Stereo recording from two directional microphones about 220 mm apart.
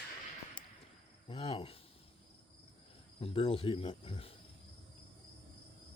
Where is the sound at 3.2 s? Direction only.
25° left (ahead or behind).